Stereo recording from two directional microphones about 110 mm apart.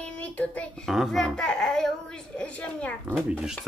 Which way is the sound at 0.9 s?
Centre (ahead or behind).